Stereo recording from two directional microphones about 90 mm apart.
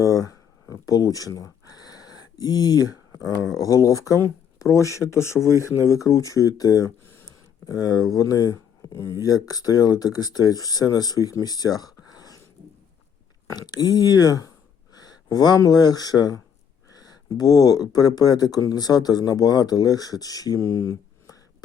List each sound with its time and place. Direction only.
0.7 s speech: 45° left (ahead or behind)
7.0 s a sound: 25° left (ahead or behind)
7.6 s speech: 45° left (ahead or behind)
9.2 s speech: 45° left (ahead or behind)
13.6 s speech: 45° left (ahead or behind)
20.6 s speech: 30° left (ahead or behind)